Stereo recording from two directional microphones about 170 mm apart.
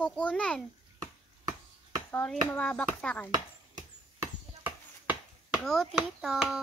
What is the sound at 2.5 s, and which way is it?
Speech, 10° left (ahead or behind).